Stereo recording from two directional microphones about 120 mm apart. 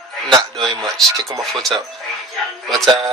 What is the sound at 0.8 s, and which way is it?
Speech, centre (ahead or behind).